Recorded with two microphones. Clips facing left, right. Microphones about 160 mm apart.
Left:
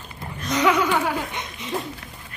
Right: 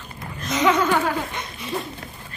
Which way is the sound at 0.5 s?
10° left (ahead or behind).